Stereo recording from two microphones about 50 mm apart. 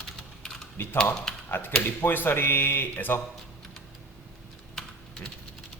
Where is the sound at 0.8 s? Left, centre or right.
Left.